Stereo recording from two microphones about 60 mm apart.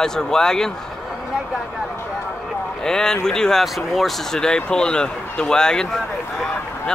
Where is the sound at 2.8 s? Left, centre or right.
Centre.